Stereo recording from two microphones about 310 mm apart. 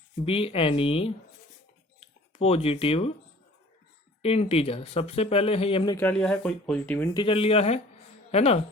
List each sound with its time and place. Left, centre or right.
0.3 s speech: centre
4.2 s speech: centre